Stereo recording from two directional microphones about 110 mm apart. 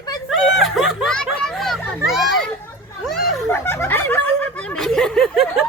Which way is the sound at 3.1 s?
Centre (ahead or behind).